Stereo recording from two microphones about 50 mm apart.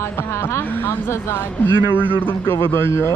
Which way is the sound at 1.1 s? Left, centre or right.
Left.